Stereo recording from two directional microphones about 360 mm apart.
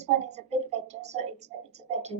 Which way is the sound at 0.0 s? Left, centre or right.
Centre.